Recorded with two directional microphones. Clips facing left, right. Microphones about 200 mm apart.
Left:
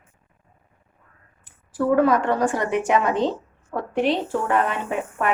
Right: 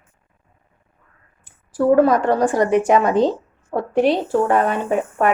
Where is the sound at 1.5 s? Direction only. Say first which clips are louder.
Right 5 dB; 40° right (ahead or behind).